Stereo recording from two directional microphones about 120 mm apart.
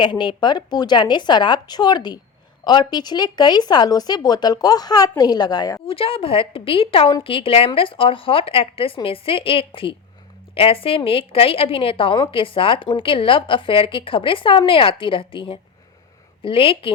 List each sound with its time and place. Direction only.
0.0 s speech: 40° left (ahead or behind)
5.9 s a woman's voice: 50° left (ahead or behind)